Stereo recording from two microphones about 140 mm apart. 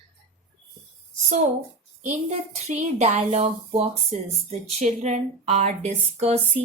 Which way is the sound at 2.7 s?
55° right (ahead or behind).